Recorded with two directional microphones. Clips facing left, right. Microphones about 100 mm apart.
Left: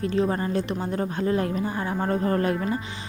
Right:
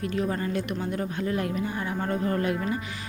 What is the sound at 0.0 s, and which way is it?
Speech, 30° left (ahead or behind).